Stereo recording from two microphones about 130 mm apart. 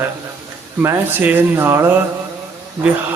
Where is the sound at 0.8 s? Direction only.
15° right (ahead or behind).